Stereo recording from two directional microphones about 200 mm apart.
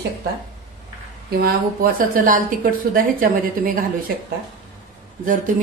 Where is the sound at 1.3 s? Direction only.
45° right (ahead or behind).